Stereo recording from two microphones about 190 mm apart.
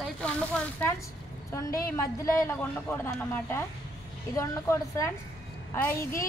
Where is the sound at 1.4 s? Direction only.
15° left (ahead or behind).